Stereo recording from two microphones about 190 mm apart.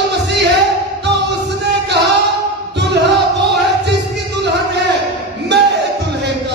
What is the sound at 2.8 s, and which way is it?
Music, 65° right (ahead or behind).